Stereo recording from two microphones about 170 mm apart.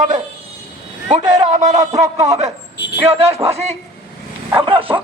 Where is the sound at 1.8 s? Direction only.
20° right (ahead or behind).